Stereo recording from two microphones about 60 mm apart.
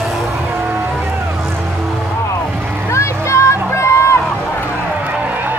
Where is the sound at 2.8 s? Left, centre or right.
Left.